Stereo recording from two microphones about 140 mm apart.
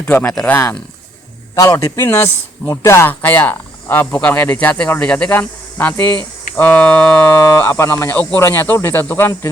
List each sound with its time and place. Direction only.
0.0 s speech: 10° left (ahead or behind)